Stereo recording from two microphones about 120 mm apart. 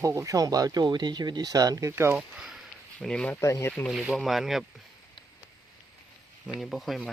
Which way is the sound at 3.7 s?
Centre (ahead or behind).